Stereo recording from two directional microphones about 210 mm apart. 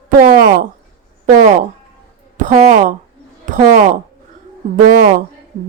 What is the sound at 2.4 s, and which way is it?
Speech, 35° right (ahead or behind).